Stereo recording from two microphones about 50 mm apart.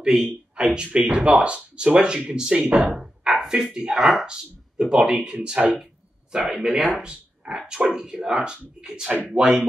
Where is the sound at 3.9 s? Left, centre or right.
Centre.